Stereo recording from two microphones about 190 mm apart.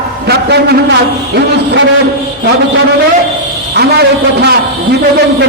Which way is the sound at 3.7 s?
60° right (ahead or behind).